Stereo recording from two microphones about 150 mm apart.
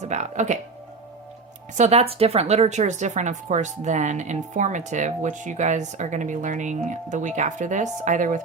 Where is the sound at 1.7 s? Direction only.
50° right (ahead or behind).